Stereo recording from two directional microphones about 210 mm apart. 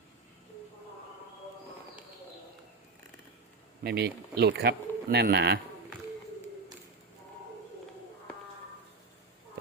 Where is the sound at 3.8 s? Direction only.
50° right (ahead or behind).